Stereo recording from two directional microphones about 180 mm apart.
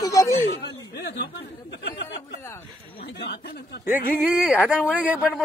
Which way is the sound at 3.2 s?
65° left (ahead or behind).